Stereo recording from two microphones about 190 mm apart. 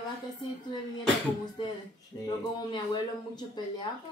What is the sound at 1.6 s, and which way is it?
Speech, 25° left (ahead or behind).